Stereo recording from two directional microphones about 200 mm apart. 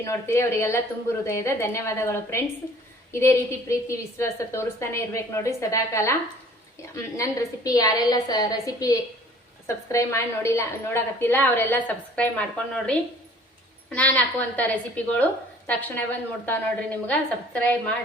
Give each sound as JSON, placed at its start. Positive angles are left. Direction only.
{"t": 0.0, "sound": "a woman's voice", "side_deg": 15}